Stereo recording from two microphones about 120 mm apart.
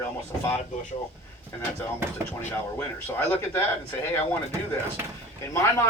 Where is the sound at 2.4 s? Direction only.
15° left (ahead or behind).